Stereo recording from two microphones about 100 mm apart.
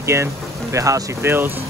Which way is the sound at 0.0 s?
30° right (ahead or behind).